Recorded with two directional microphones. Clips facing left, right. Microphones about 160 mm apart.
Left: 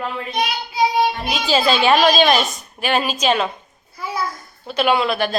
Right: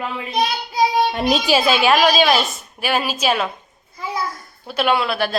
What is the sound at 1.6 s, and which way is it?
A woman's voice, 5° right (ahead or behind).